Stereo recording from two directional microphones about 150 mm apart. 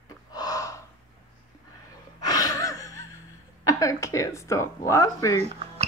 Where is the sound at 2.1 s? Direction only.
25° left (ahead or behind).